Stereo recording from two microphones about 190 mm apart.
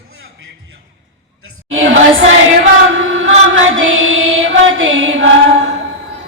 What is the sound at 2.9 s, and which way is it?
Chant, 90° right.